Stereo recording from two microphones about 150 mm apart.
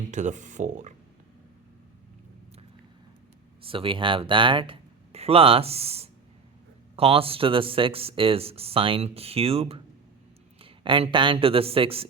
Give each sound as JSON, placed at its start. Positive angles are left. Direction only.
{"t": 0.1, "sound": "speech", "side_deg": -55}
{"t": 3.6, "sound": "speech", "side_deg": -35}